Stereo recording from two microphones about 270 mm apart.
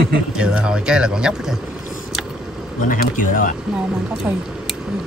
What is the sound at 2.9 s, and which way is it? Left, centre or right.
Speech, left.